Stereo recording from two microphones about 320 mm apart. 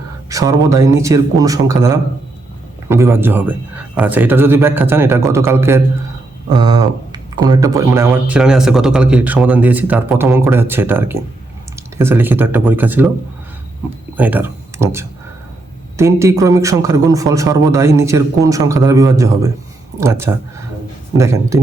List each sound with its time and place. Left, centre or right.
0.3 s speech: centre
14.2 s speech: centre